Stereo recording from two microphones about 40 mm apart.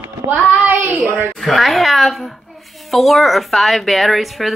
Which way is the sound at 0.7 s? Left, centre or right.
Right.